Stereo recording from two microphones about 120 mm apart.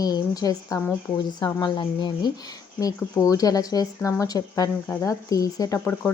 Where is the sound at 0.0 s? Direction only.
30° left (ahead or behind).